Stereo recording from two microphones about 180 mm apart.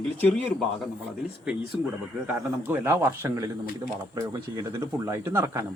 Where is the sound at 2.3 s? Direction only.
10° right (ahead or behind).